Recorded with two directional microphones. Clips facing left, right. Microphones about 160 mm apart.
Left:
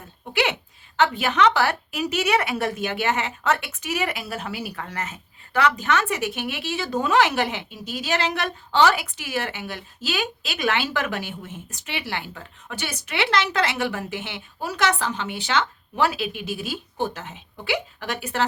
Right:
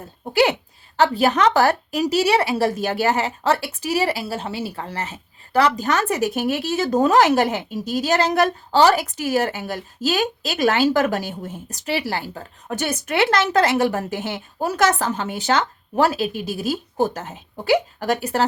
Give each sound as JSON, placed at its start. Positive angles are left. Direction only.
{"t": 0.9, "sound": "a woman's voice", "side_deg": -35}